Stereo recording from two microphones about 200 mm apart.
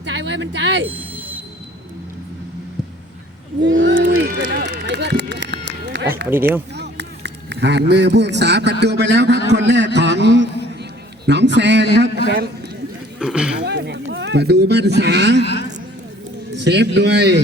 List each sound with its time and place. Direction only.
0.0 s a sound: 60° right (ahead or behind)
0.9 s a sound: 10° right (ahead or behind)
3.6 s speech: 70° right (ahead or behind)
4.1 s speech: 50° right (ahead or behind)
6.7 s a sound: 55° right (ahead or behind)
8.8 s speech: 55° right (ahead or behind)
13.1 s speech: 5° right (ahead or behind)
13.6 s speech: 55° right (ahead or behind)
15.4 s a man's voice: 60° left (ahead or behind)
16.5 s speech: 60° right (ahead or behind)